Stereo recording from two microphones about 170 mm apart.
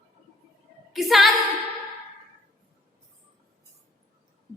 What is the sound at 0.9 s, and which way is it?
Female singing, centre (ahead or behind).